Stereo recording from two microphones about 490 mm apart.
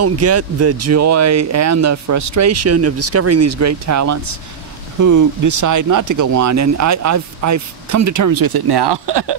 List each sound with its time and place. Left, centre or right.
0.0 s speech: right